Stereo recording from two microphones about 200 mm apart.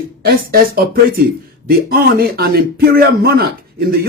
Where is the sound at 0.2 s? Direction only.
50° right (ahead or behind).